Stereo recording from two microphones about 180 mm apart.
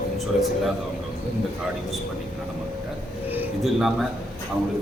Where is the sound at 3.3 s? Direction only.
5° right (ahead or behind).